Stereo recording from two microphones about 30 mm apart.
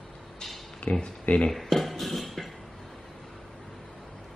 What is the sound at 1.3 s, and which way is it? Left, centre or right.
Speech, left.